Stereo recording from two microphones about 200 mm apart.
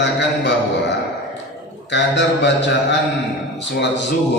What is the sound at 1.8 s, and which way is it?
A man's voice, 60° left (ahead or behind).